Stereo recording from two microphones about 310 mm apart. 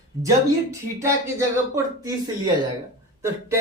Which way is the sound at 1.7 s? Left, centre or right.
Centre.